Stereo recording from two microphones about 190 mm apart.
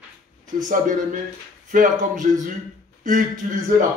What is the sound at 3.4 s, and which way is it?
Speech, 45° right (ahead or behind).